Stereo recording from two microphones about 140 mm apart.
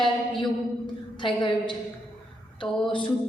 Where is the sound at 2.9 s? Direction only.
35° left (ahead or behind).